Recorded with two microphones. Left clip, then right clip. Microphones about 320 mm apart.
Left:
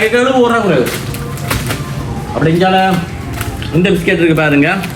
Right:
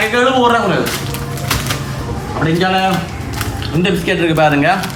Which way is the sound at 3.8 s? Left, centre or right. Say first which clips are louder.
Left 4 dB; centre.